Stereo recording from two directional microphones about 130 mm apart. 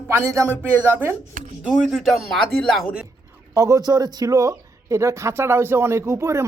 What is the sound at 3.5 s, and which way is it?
Speech, 25° right (ahead or behind).